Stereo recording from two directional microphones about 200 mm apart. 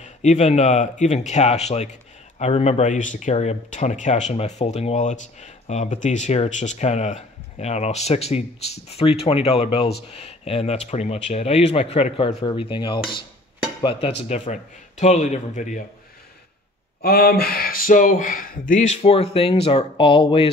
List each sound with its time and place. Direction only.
0.0 s speech: 35° left (ahead or behind)
13.7 s a sound: 25° left (ahead or behind)
14.3 s speech: 35° left (ahead or behind)
17.0 s speech: 50° left (ahead or behind); by 20.4 s 25° left (ahead or behind)